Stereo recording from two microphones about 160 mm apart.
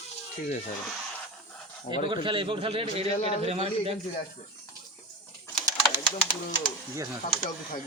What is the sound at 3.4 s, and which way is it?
Speech, 40° right (ahead or behind).